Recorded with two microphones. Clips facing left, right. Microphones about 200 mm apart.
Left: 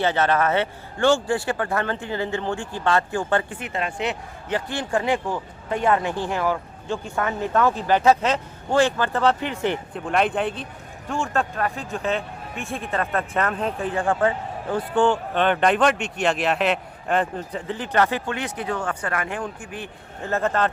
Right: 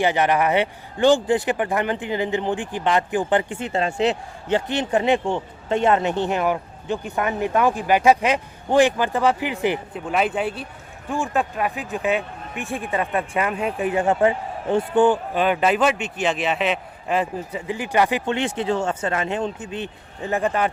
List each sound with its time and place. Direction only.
0.0 s a man's voice: 15° right (ahead or behind)
3.6 s a man's voice: 30° right (ahead or behind)
15.3 s a man's voice: 5° right (ahead or behind)
18.3 s speech: 25° right (ahead or behind)